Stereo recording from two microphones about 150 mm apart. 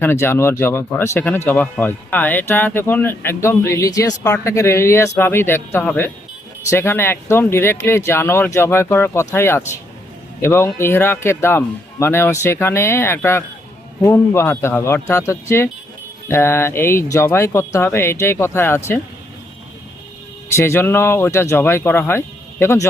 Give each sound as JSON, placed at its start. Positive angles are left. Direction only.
{"t": 0.0, "sound": "speech", "side_deg": 15}
{"t": 20.5, "sound": "speech", "side_deg": 20}